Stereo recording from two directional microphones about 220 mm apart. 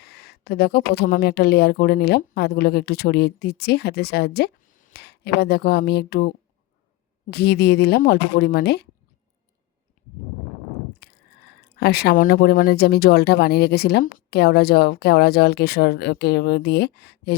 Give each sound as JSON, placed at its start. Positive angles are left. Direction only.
{"t": 0.0, "sound": "speech", "side_deg": 45}
{"t": 11.0, "sound": "biting", "side_deg": 45}
{"t": 11.8, "sound": "speech", "side_deg": 45}